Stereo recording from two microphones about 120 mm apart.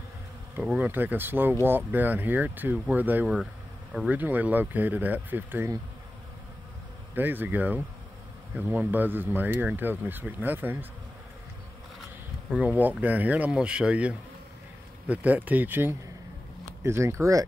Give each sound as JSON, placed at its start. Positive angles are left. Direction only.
{"t": 0.7, "sound": "speech", "side_deg": -15}
{"t": 7.2, "sound": "speech", "side_deg": -15}
{"t": 12.4, "sound": "speech", "side_deg": -10}